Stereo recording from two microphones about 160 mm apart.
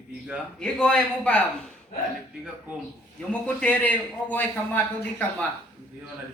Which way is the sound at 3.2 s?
10° left (ahead or behind).